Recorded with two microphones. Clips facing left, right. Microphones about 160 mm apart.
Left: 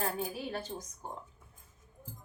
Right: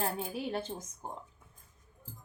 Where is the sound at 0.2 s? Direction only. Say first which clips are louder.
Right 1 dB; 25° right (ahead or behind).